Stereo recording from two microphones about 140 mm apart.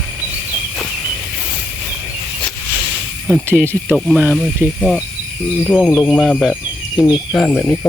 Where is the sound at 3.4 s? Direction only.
15° right (ahead or behind).